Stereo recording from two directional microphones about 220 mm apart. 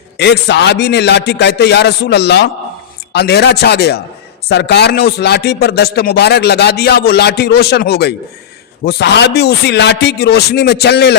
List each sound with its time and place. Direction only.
0.2 s speech: 50° left (ahead or behind)